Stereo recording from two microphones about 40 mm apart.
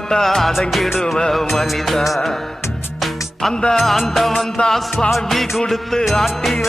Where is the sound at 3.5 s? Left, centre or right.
Centre.